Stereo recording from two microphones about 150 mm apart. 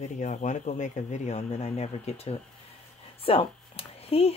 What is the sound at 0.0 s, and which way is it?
Speech, 55° left (ahead or behind).